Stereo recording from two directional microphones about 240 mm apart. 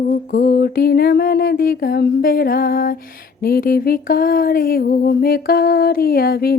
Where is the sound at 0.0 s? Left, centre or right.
Left.